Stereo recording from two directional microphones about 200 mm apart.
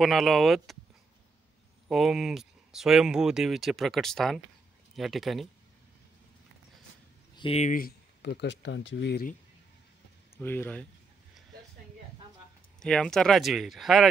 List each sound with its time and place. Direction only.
0.0 s speech: centre (ahead or behind)
1.9 s speech: centre (ahead or behind)
7.3 s speech: 30° left (ahead or behind); by 9.3 s 55° left (ahead or behind)
10.3 s speech: 10° left (ahead or behind)
12.8 s speech: 5° left (ahead or behind)